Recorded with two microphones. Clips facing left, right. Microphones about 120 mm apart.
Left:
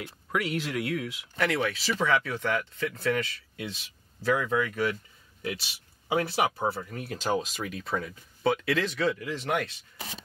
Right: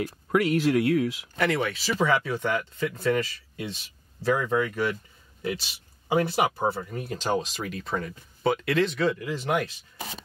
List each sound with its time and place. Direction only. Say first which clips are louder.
0.0 s speech: right 7 dB; 40° right (ahead or behind)
1.4 s speech: right 2 dB; centre (ahead or behind)